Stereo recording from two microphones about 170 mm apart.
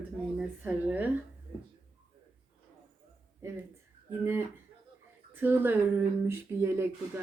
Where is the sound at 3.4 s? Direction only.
15° right (ahead or behind).